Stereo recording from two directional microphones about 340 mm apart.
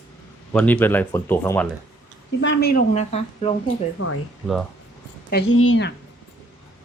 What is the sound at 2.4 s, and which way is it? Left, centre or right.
Speech, left.